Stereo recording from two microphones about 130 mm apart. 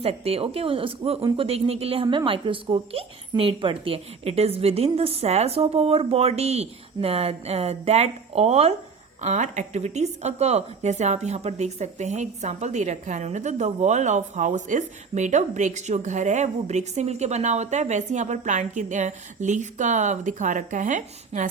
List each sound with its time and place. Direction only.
0.0 s speech: 50° right (ahead or behind)
9.2 s a woman's voice: 65° right (ahead or behind)